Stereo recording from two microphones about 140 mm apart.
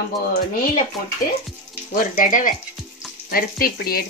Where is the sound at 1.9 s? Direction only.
75° left (ahead or behind).